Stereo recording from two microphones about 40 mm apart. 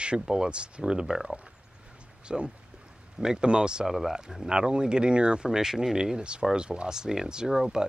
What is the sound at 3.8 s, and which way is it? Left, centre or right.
Speech, centre.